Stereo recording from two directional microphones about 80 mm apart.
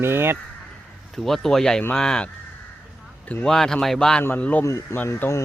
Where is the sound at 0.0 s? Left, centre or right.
Right.